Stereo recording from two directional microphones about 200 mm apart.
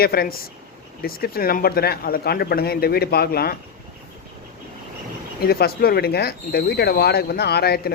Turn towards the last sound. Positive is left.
turn(degrees=50)  # may be behind; listen again after turning